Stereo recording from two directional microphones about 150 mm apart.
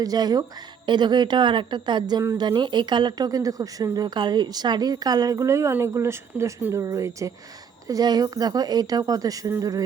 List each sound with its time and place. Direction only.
0.0 s speech: 25° right (ahead or behind)